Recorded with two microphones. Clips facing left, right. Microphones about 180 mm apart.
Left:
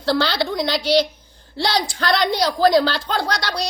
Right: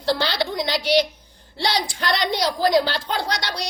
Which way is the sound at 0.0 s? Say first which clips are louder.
Left 3 dB; 15° right (ahead or behind).